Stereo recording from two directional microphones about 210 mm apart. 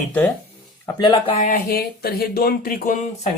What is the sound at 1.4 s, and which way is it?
Speech, 40° left (ahead or behind).